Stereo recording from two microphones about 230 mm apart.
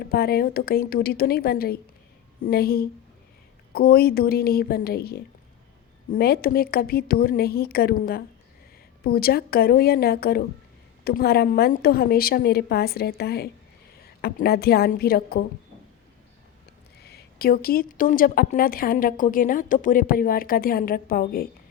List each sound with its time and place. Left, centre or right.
0.0 s a woman's voice: left
17.0 s a woman's voice: left